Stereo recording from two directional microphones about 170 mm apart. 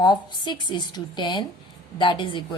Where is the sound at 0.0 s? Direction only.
25° left (ahead or behind).